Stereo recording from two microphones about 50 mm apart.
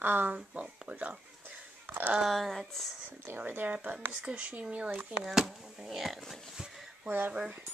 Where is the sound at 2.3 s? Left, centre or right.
Centre.